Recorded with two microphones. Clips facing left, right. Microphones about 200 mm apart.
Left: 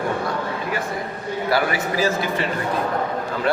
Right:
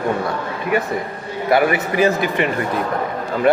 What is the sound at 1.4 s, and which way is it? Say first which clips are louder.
A man's voice: right 6 dB; 55° right (ahead or behind).